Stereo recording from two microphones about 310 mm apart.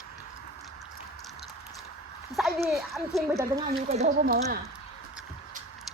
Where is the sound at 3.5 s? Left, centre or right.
Right.